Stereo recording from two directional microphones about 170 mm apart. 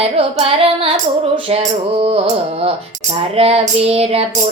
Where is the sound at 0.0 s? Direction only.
35° right (ahead or behind).